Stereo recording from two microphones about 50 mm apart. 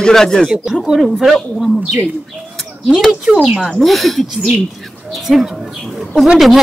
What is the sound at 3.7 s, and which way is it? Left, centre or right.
Speech, centre.